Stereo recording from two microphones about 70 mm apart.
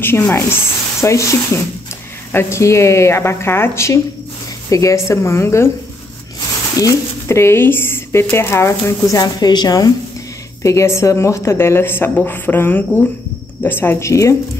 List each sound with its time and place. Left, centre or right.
0.0 s a woman's voice: left
6.8 s speech: left
9.2 s a woman's voice: left
10.6 s a woman's voice: left
13.9 s a woman's voice: left